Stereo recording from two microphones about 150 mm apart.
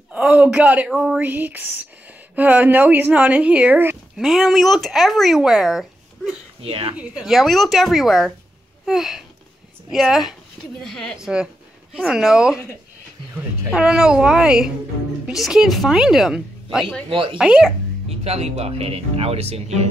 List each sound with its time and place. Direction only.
0.1 s speech: 10° right (ahead or behind)
6.6 s speech: 40° right (ahead or behind)
7.0 s speech: 5° right (ahead or behind)
13.7 s speech: 5° right (ahead or behind)
17.1 s speech: 35° right (ahead or behind)
17.4 s speech: 5° right (ahead or behind)
18.0 s speech: 45° right (ahead or behind)